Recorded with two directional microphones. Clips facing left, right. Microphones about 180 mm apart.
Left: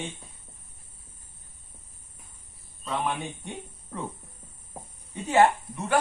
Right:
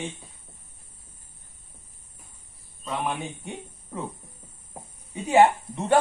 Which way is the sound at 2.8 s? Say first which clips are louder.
Even; 10° right (ahead or behind).